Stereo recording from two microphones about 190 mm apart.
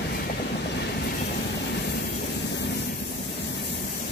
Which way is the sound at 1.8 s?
55° left (ahead or behind).